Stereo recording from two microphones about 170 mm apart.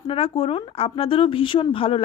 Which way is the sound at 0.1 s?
35° left (ahead or behind).